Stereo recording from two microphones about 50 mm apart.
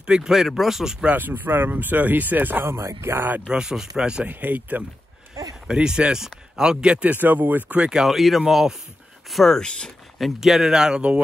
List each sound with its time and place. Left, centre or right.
0.0 s speech: centre
1.1 s speech: right
2.6 s speech: right
3.2 s speech: right
3.4 s speech: centre
4.3 s speech: right
5.7 s speech: centre
7.2 s speech: right
7.9 s speech: centre
9.3 s speech: centre
9.6 s speech: centre
10.1 s speech: centre